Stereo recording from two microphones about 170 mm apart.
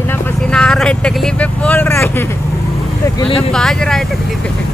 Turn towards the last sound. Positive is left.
turn(degrees=0)  # may be behind; listen again after turning